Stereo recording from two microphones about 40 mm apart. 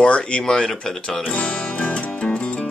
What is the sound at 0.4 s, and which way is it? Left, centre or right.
Speech, centre.